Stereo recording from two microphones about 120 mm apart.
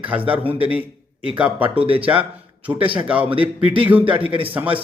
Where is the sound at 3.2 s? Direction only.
45° right (ahead or behind).